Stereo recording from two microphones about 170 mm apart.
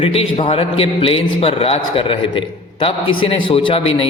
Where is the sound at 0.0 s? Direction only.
35° left (ahead or behind).